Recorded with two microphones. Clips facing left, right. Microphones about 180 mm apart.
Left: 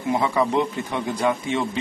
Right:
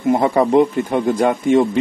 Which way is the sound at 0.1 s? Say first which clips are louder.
Right 7 dB; 45° right (ahead or behind).